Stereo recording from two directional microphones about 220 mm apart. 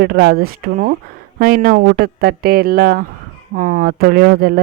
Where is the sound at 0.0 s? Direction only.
45° right (ahead or behind).